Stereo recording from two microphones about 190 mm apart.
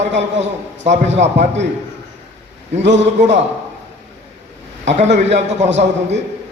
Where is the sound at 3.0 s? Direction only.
35° right (ahead or behind).